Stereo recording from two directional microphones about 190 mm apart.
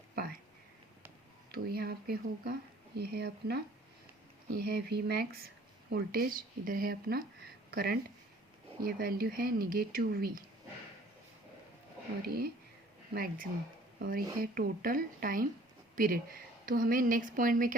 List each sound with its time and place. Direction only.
1.5 s a woman's voice: 55° right (ahead or behind)
12.2 s a woman's voice: 55° right (ahead or behind)